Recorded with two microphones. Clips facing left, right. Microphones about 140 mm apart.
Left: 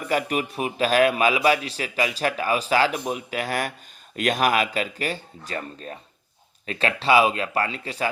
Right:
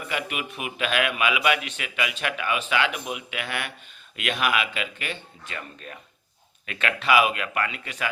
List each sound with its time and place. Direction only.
0.1 s a man's voice: 40° left (ahead or behind)